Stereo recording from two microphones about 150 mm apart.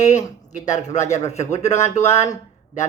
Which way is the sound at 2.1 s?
20° left (ahead or behind).